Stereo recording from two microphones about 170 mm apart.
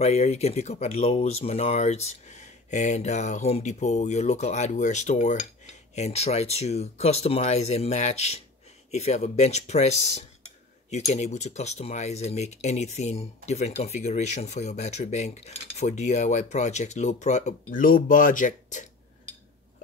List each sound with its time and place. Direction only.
0.0 s speech: 40° left (ahead or behind)